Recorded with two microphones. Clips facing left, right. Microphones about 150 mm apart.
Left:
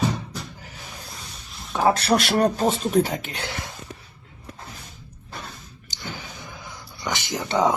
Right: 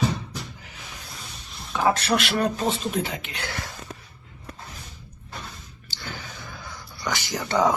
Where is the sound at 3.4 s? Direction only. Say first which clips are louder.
Left 1 dB; 20° left (ahead or behind).